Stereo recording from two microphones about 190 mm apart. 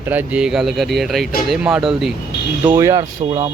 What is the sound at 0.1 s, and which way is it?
Speech, 5° right (ahead or behind).